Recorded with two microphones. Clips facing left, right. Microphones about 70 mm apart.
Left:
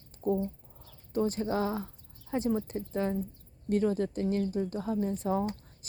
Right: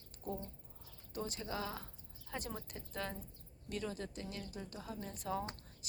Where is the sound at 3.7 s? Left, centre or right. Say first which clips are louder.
Left 14 dB; left.